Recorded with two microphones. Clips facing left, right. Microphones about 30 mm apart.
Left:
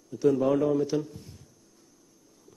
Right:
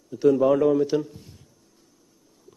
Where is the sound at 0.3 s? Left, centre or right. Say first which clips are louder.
Right 5 dB; centre.